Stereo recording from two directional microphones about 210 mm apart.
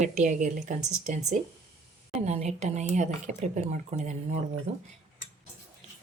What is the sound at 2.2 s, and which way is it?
A woman's voice, 30° right (ahead or behind).